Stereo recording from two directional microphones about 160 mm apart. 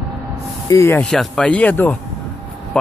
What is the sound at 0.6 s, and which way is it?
Speech, 15° left (ahead or behind).